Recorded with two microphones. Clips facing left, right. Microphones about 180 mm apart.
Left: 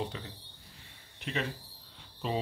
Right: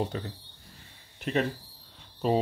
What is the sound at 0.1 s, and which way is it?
Speech, 45° right (ahead or behind).